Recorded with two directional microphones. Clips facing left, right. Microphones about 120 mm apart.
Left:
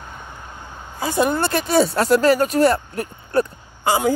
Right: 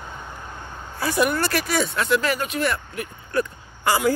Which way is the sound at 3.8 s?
20° left (ahead or behind).